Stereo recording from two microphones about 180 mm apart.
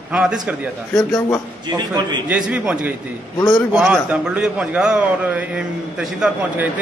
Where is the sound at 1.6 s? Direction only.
25° right (ahead or behind).